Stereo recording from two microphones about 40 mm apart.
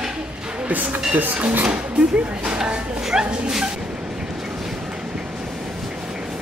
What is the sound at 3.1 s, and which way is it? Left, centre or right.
Speech, right.